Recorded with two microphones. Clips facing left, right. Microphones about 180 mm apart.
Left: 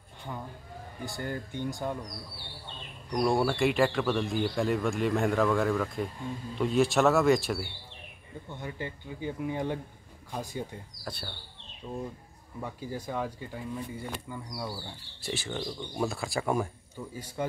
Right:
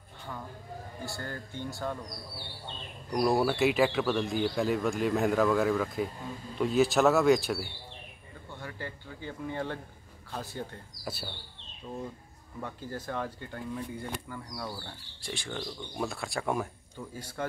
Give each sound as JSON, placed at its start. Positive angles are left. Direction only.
{"t": 1.0, "sound": "speech", "side_deg": 15}
{"t": 3.1, "sound": "speech", "side_deg": -5}
{"t": 8.5, "sound": "speech", "side_deg": 20}
{"t": 11.1, "sound": "speech", "side_deg": -5}
{"t": 12.5, "sound": "speech", "side_deg": 10}
{"t": 17.1, "sound": "speech", "side_deg": 10}